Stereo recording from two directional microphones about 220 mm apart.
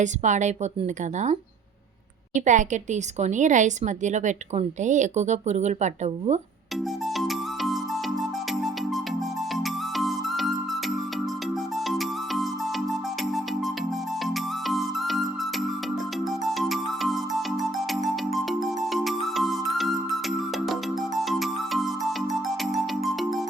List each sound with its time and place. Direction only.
0.0 s a woman's voice: 35° right (ahead or behind)
7.2 s music: centre (ahead or behind)
21.2 s music: centre (ahead or behind)